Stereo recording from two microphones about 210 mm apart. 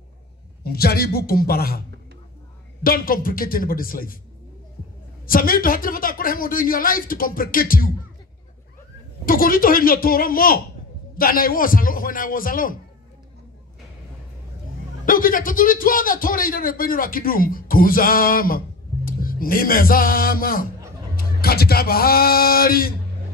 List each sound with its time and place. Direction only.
0.7 s a man's voice: 45° left (ahead or behind)
5.2 s a man's voice: 45° left (ahead or behind)
9.2 s a man's voice: 45° left (ahead or behind)
15.0 s a man's voice: 40° left (ahead or behind)
19.0 s music: 45° left (ahead or behind)
21.2 s a man's voice: 45° left (ahead or behind)